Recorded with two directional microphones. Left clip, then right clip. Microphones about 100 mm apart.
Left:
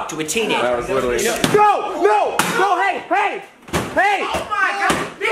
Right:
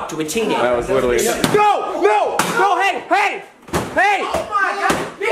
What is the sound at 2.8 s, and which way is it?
Speech, 60° right (ahead or behind).